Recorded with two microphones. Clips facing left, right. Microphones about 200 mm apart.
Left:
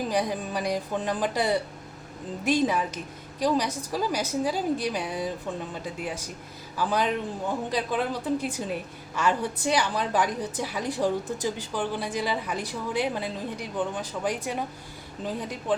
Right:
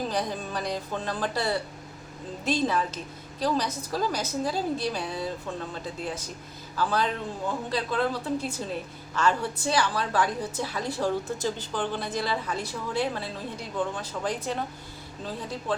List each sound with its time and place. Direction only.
0.1 s a woman's voice: 10° left (ahead or behind)